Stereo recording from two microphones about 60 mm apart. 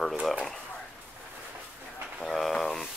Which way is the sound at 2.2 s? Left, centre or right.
Centre.